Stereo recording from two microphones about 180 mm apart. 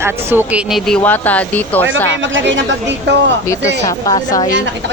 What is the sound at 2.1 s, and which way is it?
A woman's voice, 90° right.